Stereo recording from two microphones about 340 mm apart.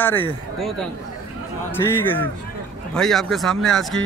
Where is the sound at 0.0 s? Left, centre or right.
Centre.